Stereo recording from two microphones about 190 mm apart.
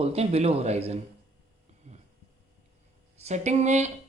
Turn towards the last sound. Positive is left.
turn(degrees=-35)  # may be behind; listen again after turning